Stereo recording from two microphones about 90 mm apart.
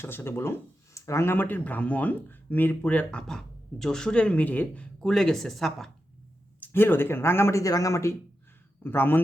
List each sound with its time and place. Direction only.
0.0 s speech: 25° left (ahead or behind)
5.0 s speech: 5° left (ahead or behind)
6.6 s speech: 25° left (ahead or behind)
8.8 s speech: 25° left (ahead or behind)